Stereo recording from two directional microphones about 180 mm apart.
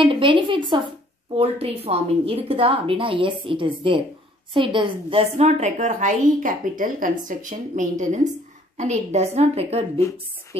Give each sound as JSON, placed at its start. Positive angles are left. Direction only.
{"t": 0.0, "sound": "a woman's voice", "side_deg": -30}
{"t": 5.4, "sound": "a woman's voice", "side_deg": -40}